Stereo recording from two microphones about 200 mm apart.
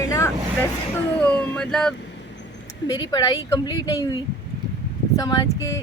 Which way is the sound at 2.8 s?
20° left (ahead or behind).